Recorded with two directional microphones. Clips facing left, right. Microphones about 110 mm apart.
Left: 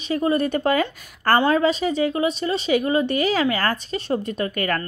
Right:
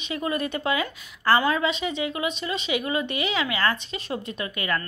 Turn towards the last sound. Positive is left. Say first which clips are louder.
# left 5 dB
turn(degrees=45)  # may be behind; listen again after turning